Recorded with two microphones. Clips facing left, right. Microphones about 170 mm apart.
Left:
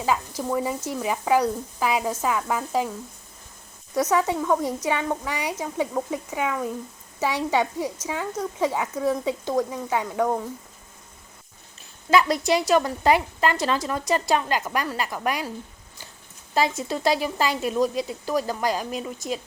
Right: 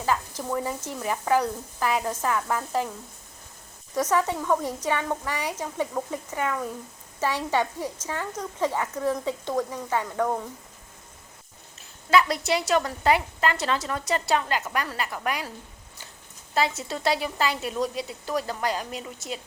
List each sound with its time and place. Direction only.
0.0 s speech: 10° left (ahead or behind)
3.9 s speech: 10° left (ahead or behind)
12.5 s a woman's voice: 20° left (ahead or behind)
16.6 s speech: 15° left (ahead or behind)